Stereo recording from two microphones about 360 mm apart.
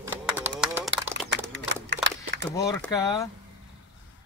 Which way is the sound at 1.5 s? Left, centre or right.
Right.